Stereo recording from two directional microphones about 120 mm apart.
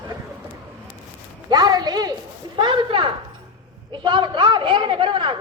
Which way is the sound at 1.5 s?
35° right (ahead or behind).